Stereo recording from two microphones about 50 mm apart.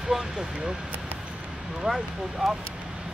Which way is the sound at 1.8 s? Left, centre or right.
Centre.